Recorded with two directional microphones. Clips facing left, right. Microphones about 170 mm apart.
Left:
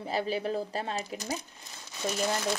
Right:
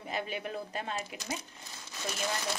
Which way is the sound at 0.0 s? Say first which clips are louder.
Left 6 dB; 35° left (ahead or behind).